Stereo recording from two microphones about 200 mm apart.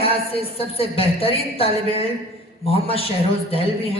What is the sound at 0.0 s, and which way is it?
A woman's voice, 30° left (ahead or behind).